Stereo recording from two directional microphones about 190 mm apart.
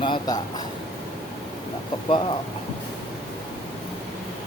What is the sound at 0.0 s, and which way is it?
Speech, 25° left (ahead or behind).